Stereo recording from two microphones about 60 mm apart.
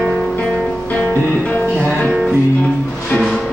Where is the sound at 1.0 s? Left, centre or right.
Left.